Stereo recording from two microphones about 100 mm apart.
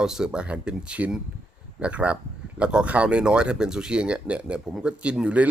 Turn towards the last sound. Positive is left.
turn(degrees=-10)  # may be behind; listen again after turning